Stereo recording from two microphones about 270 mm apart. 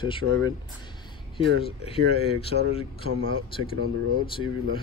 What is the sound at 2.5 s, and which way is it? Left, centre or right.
Speech, right.